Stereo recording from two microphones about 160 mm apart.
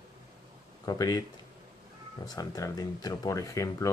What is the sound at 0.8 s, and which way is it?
Speech, 25° left (ahead or behind).